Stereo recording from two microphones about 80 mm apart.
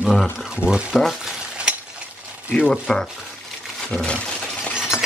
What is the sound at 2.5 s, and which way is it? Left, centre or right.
Speech, centre.